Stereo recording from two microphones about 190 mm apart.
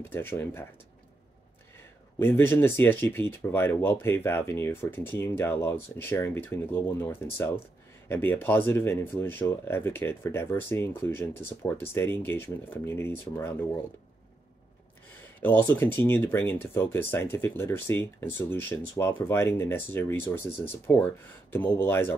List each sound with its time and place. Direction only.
0.1 s speech: 10° left (ahead or behind)
2.1 s speech: 10° left (ahead or behind)
15.4 s speech: 10° left (ahead or behind)